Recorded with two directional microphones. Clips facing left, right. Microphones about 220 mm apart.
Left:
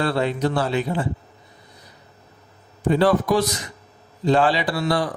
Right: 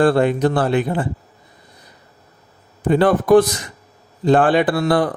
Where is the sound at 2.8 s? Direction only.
55° right (ahead or behind).